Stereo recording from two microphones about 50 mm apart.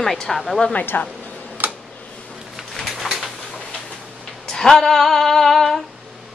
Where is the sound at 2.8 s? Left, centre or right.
Centre.